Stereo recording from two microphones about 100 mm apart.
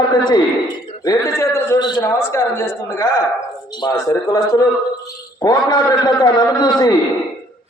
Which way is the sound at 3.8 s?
40° left (ahead or behind).